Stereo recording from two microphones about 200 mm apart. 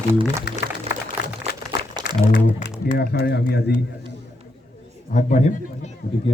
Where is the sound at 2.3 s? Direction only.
50° left (ahead or behind).